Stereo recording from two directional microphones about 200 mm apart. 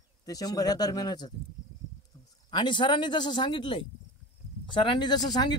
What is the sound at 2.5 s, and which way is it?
Speech, 25° left (ahead or behind).